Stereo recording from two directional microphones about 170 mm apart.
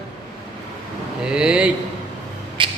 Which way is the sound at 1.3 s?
5° right (ahead or behind).